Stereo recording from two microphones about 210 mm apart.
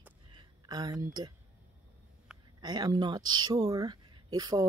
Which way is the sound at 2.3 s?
5° right (ahead or behind).